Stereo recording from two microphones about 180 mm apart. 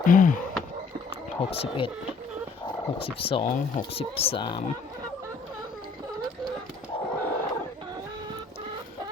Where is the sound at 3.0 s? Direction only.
30° left (ahead or behind).